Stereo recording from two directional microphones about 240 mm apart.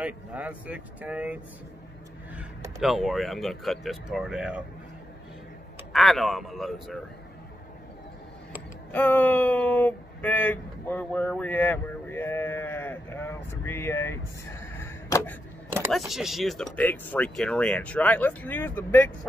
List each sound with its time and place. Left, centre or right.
0.0 s speech: centre
5.9 s speech: centre
8.9 s speech: centre
16.0 s speech: centre